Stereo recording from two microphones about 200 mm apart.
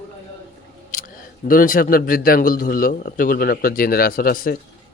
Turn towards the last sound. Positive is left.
turn(degrees=45)  # may be behind; listen again after turning